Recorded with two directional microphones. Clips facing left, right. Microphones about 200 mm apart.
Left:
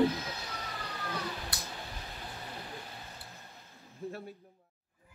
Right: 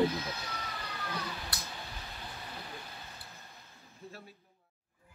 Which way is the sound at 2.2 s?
15° left (ahead or behind).